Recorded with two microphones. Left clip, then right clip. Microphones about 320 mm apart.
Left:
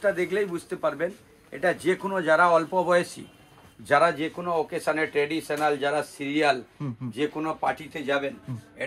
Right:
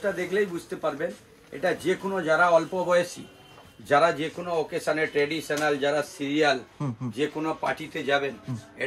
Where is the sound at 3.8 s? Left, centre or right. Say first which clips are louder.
Even; centre.